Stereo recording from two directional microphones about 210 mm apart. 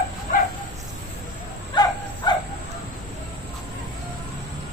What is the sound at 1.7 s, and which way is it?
Wild animals, 20° left (ahead or behind).